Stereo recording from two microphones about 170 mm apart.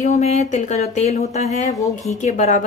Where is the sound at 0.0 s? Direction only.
40° left (ahead or behind).